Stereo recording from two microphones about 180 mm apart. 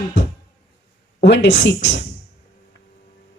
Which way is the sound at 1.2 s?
80° left.